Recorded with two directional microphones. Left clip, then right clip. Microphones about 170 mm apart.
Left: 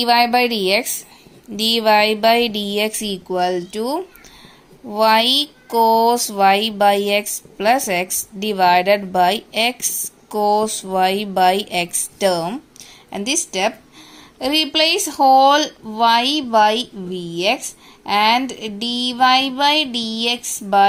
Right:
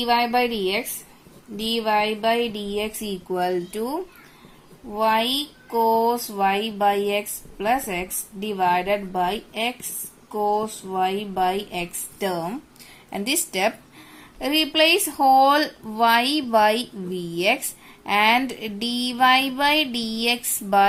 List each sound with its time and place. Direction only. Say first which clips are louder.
0.0 s speech: left 6 dB; 40° left (ahead or behind)
13.1 s speech: left 4 dB; 15° left (ahead or behind)